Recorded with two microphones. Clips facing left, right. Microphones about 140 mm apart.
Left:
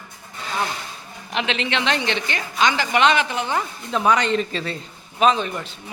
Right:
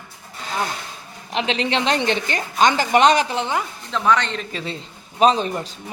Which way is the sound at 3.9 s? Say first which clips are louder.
Left 1 dB; 10° left (ahead or behind).